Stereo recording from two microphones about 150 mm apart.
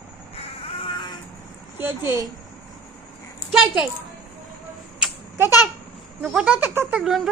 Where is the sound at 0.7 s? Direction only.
35° left (ahead or behind).